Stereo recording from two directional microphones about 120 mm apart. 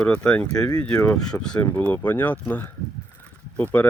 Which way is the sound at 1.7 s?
15° left (ahead or behind).